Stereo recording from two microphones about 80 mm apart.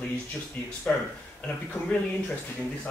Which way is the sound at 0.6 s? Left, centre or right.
Centre.